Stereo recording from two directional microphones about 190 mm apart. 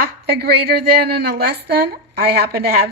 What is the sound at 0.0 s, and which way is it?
A woman's voice, 55° right (ahead or behind).